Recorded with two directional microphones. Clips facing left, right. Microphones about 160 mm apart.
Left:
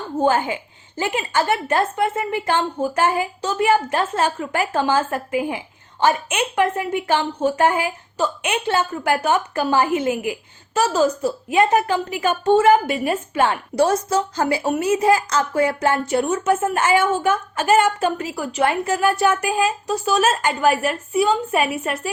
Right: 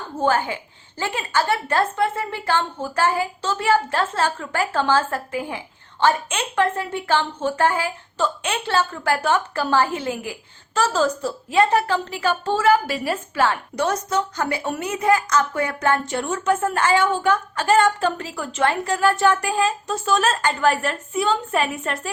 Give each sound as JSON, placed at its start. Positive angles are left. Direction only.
{"t": 0.2, "sound": "a woman's voice", "side_deg": 20}